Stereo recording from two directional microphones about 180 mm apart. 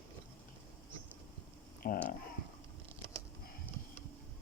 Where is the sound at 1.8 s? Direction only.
50° left (ahead or behind).